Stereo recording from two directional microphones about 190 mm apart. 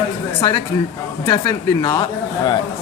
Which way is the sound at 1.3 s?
20° left (ahead or behind).